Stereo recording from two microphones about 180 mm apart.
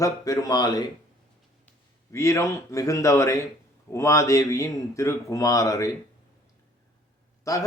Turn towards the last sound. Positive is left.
turn(degrees=20)  # may be behind; listen again after turning